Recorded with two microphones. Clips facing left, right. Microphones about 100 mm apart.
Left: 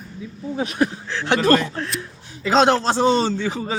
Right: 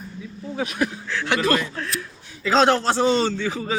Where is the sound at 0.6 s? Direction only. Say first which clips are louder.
Left 3 dB; 35° left (ahead or behind).